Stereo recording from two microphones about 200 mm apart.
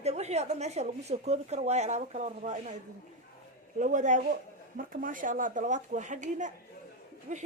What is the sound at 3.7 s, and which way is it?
A woman's voice, 40° right (ahead or behind).